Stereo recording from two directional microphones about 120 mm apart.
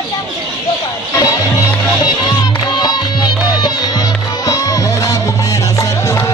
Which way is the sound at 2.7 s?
35° left (ahead or behind).